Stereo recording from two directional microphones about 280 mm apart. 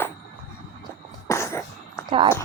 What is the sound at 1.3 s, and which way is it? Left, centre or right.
Throat clearing, centre.